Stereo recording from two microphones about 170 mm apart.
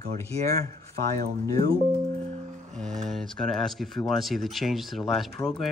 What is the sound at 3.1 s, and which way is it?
Speech, centre (ahead or behind).